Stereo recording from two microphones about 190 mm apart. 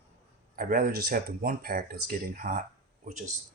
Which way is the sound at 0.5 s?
50° right (ahead or behind).